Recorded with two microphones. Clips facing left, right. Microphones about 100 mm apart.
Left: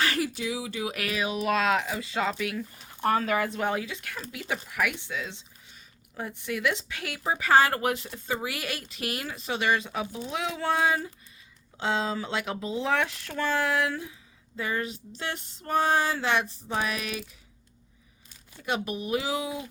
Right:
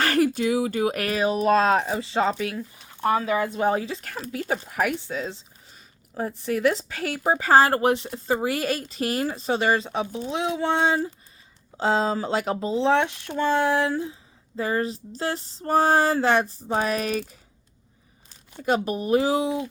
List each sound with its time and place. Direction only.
0.0 s speech: 50° right (ahead or behind); by 2.6 s 30° right (ahead or behind)
3.0 s speech: 15° right (ahead or behind)
11.8 s speech: 40° right (ahead or behind)
18.5 s speech: 40° right (ahead or behind)